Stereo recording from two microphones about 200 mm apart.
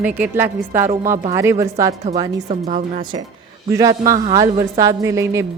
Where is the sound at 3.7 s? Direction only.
15° right (ahead or behind).